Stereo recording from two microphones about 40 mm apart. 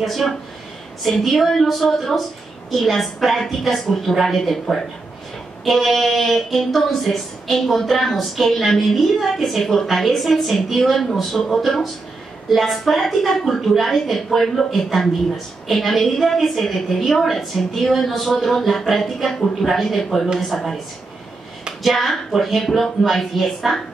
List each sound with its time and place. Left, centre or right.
0.0 s a woman's voice: centre
20.0 s a woman's voice: centre
21.8 s a woman's voice: centre